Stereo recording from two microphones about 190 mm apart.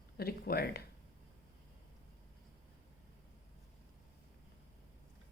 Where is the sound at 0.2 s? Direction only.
55° left (ahead or behind).